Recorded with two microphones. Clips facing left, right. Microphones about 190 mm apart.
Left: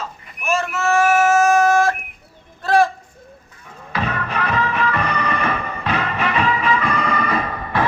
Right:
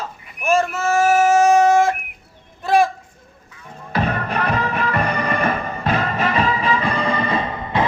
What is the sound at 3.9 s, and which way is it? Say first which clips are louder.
Music: right 2 dB; 50° right (ahead or behind).